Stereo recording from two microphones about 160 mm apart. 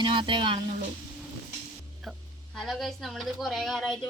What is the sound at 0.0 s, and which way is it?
Speech, 30° right (ahead or behind).